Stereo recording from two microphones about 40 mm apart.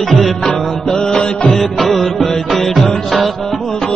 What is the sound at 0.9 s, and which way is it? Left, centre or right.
Music, centre.